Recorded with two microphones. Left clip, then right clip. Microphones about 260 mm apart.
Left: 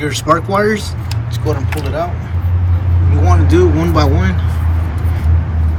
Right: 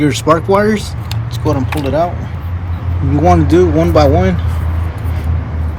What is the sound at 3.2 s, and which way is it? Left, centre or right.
A man's voice, centre.